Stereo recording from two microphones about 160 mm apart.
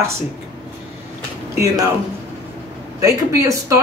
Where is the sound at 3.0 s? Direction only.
20° right (ahead or behind).